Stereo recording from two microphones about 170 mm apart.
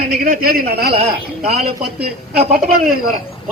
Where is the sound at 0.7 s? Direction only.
65° right (ahead or behind).